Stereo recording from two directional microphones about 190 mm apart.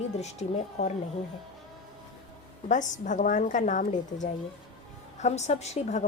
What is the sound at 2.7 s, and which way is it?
A woman's voice, 40° left (ahead or behind).